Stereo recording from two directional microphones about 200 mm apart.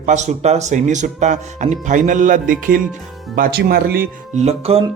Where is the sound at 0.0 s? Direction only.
35° right (ahead or behind).